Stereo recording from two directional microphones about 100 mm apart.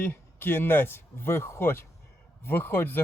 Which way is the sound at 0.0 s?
20° left (ahead or behind).